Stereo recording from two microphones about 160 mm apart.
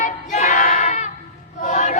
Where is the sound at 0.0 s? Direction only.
50° left (ahead or behind).